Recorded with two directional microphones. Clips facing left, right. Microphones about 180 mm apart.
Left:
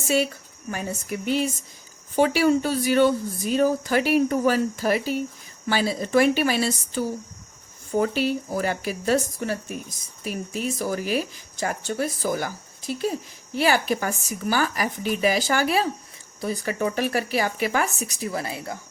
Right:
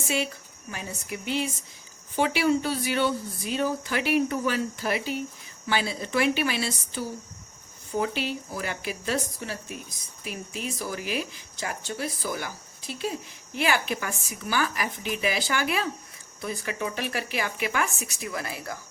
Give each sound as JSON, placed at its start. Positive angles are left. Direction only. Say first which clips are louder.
{"t": 0.7, "sound": "speech", "louder": "left 6 dB", "side_deg": 45}